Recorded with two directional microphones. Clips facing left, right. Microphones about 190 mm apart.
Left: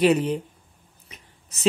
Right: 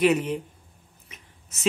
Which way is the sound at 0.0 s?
35° left (ahead or behind).